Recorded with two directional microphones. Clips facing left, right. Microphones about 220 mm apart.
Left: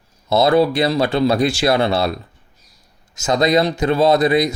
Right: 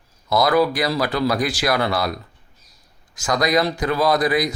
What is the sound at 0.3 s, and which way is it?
Speech, 25° left (ahead or behind).